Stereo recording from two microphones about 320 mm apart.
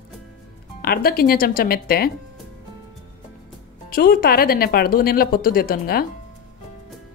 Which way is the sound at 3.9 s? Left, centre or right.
Left.